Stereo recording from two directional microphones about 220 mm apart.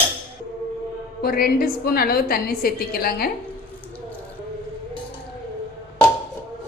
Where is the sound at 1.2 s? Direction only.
45° left (ahead or behind).